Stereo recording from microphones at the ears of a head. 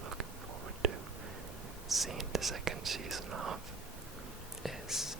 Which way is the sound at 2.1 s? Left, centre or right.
Right.